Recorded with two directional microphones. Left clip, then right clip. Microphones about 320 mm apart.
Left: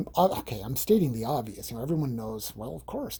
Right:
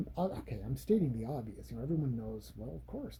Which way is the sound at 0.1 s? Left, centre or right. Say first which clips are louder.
Left 15 dB; centre.